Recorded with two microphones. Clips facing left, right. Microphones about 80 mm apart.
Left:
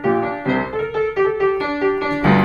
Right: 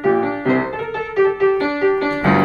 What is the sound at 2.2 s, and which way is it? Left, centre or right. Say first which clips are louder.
Music: even; right.